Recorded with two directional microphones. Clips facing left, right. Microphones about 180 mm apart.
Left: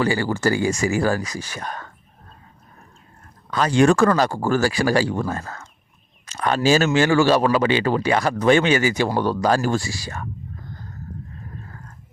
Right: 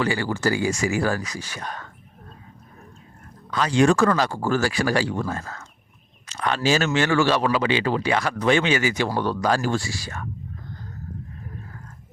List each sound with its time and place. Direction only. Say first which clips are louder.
0.0 s speech: left 3 dB; 40° left (ahead or behind)
3.5 s speech: left 2 dB; 50° left (ahead or behind)